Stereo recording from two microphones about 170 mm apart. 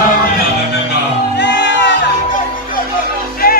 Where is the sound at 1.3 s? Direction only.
90° left.